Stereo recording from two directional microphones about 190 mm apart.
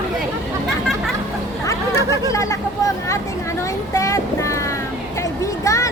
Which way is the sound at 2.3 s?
15° left (ahead or behind).